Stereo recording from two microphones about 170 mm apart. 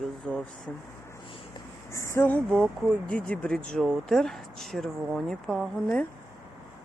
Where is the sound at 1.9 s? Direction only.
15° left (ahead or behind).